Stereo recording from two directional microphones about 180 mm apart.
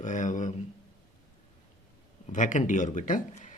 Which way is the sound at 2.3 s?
45° left (ahead or behind).